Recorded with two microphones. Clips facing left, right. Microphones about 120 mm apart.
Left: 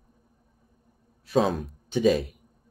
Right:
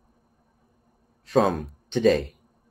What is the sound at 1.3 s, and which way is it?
Speech, centre (ahead or behind).